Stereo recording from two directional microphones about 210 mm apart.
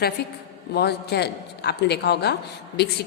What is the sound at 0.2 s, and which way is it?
A woman's voice, 50° left (ahead or behind).